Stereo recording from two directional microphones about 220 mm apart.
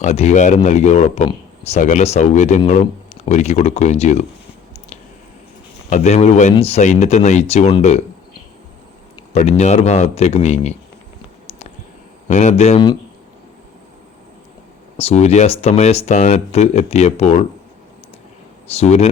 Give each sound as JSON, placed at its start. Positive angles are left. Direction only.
{"t": 0.0, "sound": "speech", "side_deg": 30}
{"t": 5.9, "sound": "speech", "side_deg": 30}
{"t": 9.1, "sound": "speech", "side_deg": 30}
{"t": 12.3, "sound": "speech", "side_deg": 30}
{"t": 14.9, "sound": "speech", "side_deg": 30}
{"t": 18.7, "sound": "speech", "side_deg": 30}